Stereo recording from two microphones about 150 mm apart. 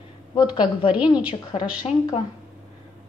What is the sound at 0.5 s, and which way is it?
Speech, 30° left (ahead or behind).